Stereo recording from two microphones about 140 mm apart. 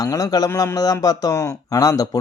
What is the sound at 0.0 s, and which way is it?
A man's voice, 25° left (ahead or behind).